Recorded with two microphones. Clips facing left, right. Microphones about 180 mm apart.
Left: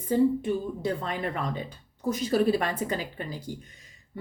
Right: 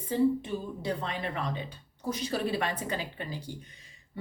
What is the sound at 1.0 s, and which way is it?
Speech, 45° left (ahead or behind).